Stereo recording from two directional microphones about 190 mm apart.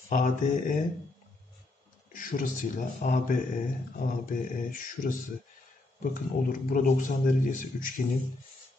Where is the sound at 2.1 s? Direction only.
45° left (ahead or behind).